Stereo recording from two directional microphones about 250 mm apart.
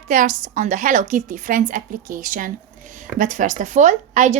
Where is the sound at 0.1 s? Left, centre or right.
Right.